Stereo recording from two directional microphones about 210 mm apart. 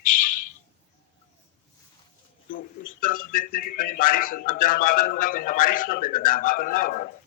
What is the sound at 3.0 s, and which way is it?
Speech, 40° left (ahead or behind).